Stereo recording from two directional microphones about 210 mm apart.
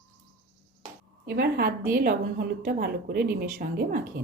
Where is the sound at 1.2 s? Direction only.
50° right (ahead or behind).